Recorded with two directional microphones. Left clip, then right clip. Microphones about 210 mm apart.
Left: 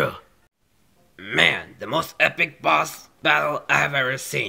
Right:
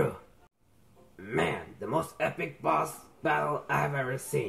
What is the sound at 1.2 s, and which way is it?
Speech, 25° left (ahead or behind).